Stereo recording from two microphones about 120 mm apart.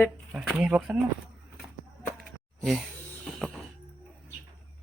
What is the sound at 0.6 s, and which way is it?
Speech, 5° right (ahead or behind).